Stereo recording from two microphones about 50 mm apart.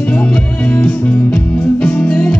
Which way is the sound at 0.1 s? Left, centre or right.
Left.